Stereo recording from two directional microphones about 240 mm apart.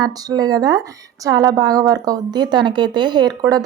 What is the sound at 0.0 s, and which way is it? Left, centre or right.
A woman's voice, centre.